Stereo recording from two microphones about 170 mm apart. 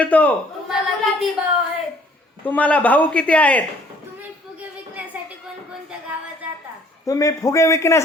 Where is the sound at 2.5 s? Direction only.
10° left (ahead or behind).